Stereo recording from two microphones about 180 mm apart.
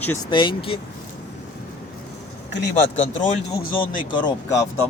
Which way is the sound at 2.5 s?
75° left (ahead or behind).